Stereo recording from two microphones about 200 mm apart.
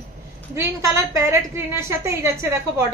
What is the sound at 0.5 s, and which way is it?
A woman's voice, 15° right (ahead or behind).